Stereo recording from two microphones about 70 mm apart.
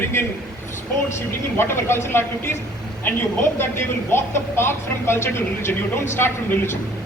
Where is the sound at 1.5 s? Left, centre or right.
Left.